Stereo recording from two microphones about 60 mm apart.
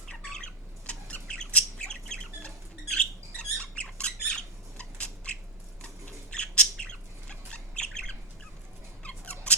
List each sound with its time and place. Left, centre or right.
0.1 s squawk: centre
1.3 s bird: centre
3.0 s squawk: centre
6.3 s bird: centre
9.0 s scissors: centre